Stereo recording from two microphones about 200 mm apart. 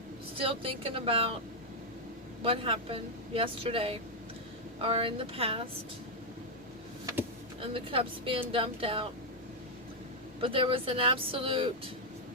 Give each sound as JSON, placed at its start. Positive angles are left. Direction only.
{"t": 0.3, "sound": "speech", "side_deg": -25}
{"t": 2.4, "sound": "speech", "side_deg": -25}
{"t": 7.6, "sound": "speech", "side_deg": -25}
{"t": 10.4, "sound": "speech", "side_deg": -25}